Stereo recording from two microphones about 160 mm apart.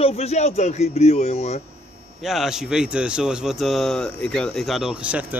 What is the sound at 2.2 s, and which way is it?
Speech, centre (ahead or behind).